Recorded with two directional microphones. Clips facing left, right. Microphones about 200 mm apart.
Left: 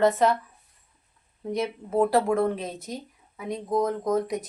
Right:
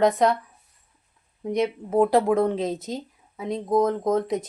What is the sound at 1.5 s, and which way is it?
Speech, 15° right (ahead or behind).